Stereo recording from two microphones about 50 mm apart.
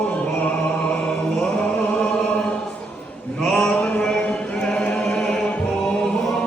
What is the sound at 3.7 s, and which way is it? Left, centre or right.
Mantra, left.